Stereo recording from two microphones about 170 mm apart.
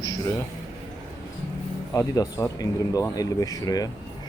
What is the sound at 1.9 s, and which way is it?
Speech, 20° left (ahead or behind).